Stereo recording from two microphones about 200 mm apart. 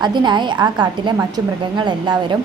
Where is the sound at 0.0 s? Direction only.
20° right (ahead or behind).